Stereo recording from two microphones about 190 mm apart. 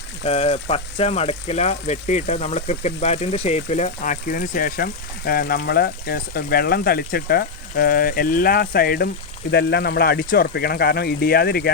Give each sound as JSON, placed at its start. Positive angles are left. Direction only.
{"t": 0.3, "sound": "speech", "side_deg": 30}